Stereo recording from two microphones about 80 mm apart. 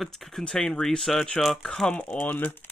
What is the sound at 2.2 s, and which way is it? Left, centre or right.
Mantra, left.